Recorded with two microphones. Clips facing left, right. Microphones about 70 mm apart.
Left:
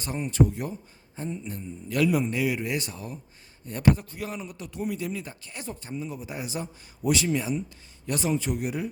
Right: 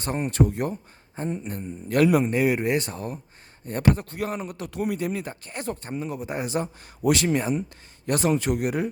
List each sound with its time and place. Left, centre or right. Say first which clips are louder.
0.0 s speech: right 1 dB; right